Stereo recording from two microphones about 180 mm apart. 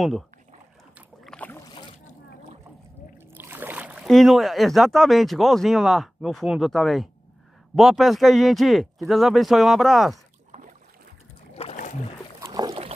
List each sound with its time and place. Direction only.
0.9 s boat: 5° left (ahead or behind)
3.3 s a man's voice: 10° right (ahead or behind)
11.5 s boat: 40° left (ahead or behind)
12.4 s boat: 25° right (ahead or behind)